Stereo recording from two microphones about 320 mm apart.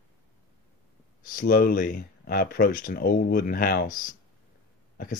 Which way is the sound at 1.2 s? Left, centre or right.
Left.